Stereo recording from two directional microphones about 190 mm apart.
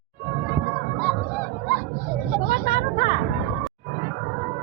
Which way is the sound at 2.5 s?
55° left (ahead or behind).